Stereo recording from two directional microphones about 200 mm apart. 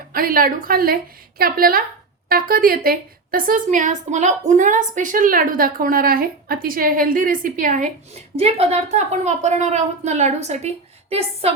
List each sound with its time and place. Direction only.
0.1 s a woman's voice: 45° right (ahead or behind); by 11.5 s 30° right (ahead or behind)